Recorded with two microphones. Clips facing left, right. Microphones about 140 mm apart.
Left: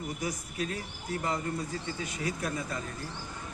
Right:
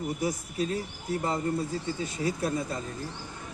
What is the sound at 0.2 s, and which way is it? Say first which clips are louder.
A man's voice: right 5 dB; 30° right (ahead or behind).